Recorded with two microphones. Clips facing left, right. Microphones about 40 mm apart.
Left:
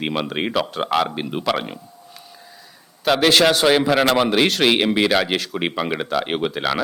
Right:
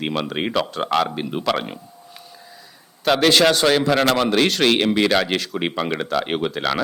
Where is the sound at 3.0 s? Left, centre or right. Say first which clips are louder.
Even; centre.